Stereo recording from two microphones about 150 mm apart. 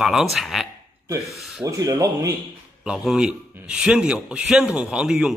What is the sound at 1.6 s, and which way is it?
Speech, 25° right (ahead or behind).